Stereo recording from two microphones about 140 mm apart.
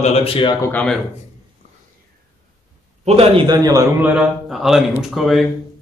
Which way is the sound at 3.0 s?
45° right (ahead or behind).